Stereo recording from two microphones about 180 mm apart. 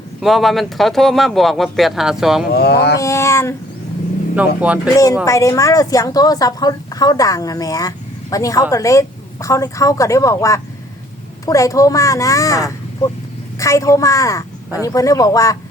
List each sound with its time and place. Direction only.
0.2 s speech: centre (ahead or behind)
2.5 s speech: 60° left (ahead or behind)
3.0 s speech: 15° left (ahead or behind)
4.4 s speech: 5° right (ahead or behind)
5.2 s a woman's voice: 15° left (ahead or behind)